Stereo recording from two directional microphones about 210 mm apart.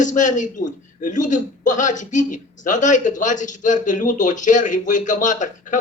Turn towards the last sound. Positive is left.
turn(degrees=35)  # may be behind; listen again after turning